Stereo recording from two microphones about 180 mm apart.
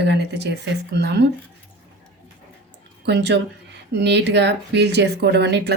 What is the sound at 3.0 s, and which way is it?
Speech, 70° right (ahead or behind).